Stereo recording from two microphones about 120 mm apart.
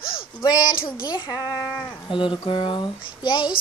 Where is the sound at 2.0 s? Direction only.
45° left (ahead or behind).